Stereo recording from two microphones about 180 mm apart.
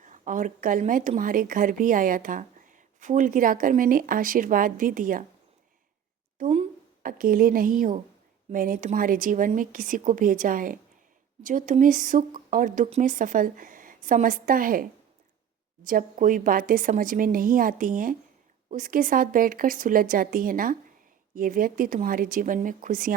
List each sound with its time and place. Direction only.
0.0 s a woman's voice: 45° right (ahead or behind)
6.4 s a sound: 35° right (ahead or behind)
7.0 s a woman's voice: 50° right (ahead or behind)